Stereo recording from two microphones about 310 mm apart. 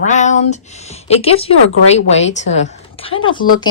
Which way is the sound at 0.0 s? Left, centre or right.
Left.